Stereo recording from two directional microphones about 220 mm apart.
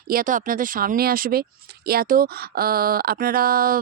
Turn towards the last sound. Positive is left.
turn(degrees=-40)  # may be behind; listen again after turning